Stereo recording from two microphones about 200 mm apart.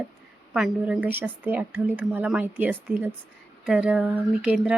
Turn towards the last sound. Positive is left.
turn(degrees=-5)  # may be behind; listen again after turning